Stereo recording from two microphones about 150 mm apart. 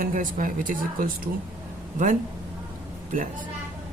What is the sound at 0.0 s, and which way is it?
Speech, 65° right (ahead or behind).